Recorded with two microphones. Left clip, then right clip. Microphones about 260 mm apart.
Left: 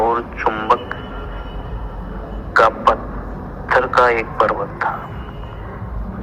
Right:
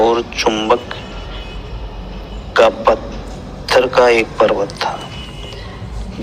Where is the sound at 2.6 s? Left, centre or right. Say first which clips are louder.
Right 2 dB; right.